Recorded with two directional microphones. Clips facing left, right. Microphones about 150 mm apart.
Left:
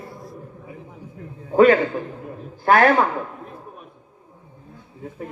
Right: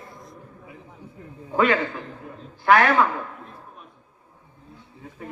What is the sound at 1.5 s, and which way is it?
A man's voice, 40° left (ahead or behind).